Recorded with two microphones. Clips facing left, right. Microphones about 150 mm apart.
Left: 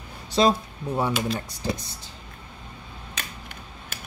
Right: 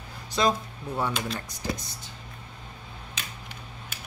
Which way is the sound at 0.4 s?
25° left (ahead or behind).